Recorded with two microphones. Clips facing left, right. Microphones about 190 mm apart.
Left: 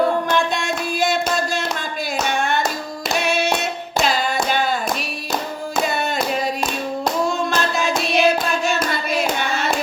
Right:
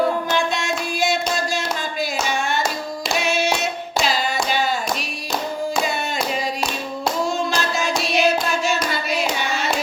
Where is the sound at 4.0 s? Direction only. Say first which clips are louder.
Left 2 dB; 50° left (ahead or behind).